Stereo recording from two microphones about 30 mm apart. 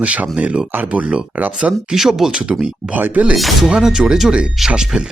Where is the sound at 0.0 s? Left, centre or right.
Right.